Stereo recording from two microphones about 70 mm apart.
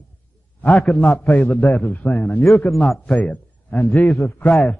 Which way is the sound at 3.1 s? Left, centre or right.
Centre.